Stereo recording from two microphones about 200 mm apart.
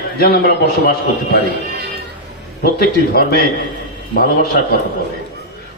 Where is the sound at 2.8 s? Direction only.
50° left (ahead or behind).